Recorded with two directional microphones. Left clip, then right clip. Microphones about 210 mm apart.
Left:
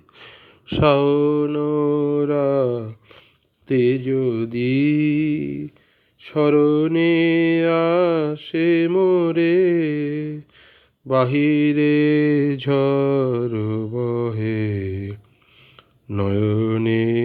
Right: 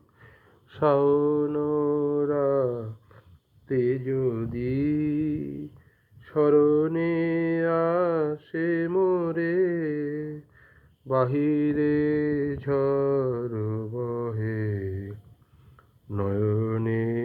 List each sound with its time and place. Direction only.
0.7 s mantra: 30° left (ahead or behind)
3.7 s speech: 40° left (ahead or behind)
4.7 s mantra: 35° left (ahead or behind)
9.8 s a sound: 35° left (ahead or behind)
10.1 s a sound: 55° left (ahead or behind)
11.3 s mantra: 30° left (ahead or behind); by 15.1 s 55° left (ahead or behind)
15.7 s mantra: 40° left (ahead or behind)